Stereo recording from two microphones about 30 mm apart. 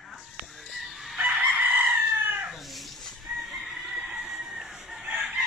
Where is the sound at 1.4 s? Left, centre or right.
Right.